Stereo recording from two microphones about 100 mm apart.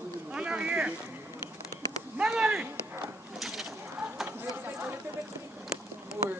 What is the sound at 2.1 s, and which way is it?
Speech, 10° right (ahead or behind).